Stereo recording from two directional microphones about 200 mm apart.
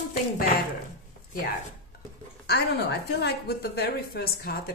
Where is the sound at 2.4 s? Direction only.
55° left (ahead or behind).